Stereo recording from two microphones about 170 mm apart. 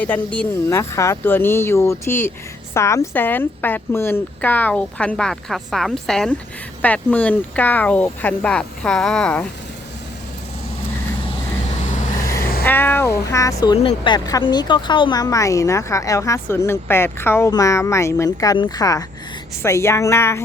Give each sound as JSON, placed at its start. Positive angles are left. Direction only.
{"t": 0.0, "sound": "speech", "side_deg": 10}
{"t": 11.8, "sound": "vehicle", "side_deg": 45}
{"t": 12.4, "sound": "vehicle", "side_deg": 55}
{"t": 12.6, "sound": "speech", "side_deg": 10}